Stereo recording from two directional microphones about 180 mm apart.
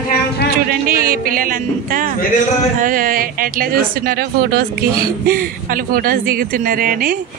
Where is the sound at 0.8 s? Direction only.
50° right (ahead or behind).